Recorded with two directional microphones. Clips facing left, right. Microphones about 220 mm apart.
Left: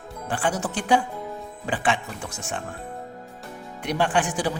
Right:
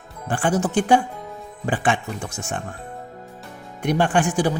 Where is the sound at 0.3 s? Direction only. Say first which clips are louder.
Right 5 dB; 45° right (ahead or behind).